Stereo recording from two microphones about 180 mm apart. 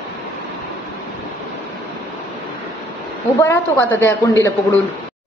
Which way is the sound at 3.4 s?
15° left (ahead or behind).